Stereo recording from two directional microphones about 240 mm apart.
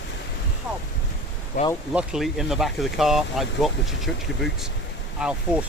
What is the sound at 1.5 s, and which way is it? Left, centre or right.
Speech, left.